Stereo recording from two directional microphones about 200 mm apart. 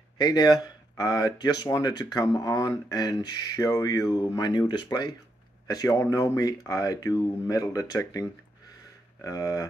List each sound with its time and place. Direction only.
0.2 s speech: 20° left (ahead or behind)